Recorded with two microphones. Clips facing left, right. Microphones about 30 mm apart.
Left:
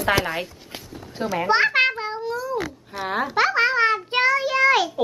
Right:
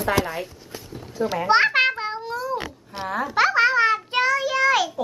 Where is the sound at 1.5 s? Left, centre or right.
Centre.